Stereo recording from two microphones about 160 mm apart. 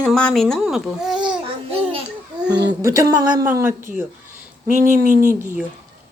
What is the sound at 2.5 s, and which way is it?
Speech, 25° right (ahead or behind).